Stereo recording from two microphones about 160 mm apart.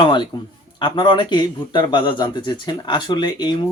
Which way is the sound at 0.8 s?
30° left (ahead or behind).